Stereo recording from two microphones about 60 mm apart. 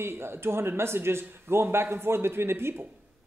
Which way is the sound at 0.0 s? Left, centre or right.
Right.